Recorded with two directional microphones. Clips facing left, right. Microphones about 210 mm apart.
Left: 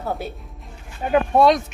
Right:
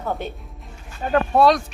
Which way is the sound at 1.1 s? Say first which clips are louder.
Left 1 dB; 20° left (ahead or behind).